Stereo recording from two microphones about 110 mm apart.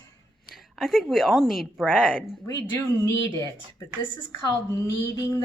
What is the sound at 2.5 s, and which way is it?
A woman's voice, 25° left (ahead or behind).